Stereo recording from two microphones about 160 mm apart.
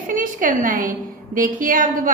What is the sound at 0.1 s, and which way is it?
A woman's voice, 55° right (ahead or behind).